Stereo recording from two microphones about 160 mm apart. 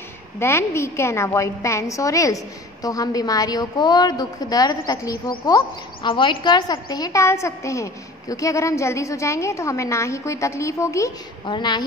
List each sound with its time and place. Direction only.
0.4 s a woman's voice: 15° left (ahead or behind)